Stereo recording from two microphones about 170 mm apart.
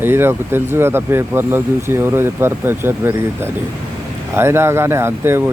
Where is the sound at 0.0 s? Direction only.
15° right (ahead or behind).